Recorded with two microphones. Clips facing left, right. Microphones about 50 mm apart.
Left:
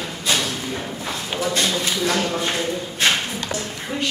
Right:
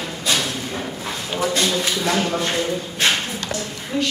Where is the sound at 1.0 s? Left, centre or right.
Centre.